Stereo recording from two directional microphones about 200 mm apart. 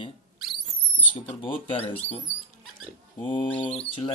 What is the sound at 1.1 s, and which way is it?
Bird, 25° left (ahead or behind).